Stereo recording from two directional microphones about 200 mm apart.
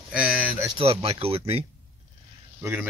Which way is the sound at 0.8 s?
30° right (ahead or behind).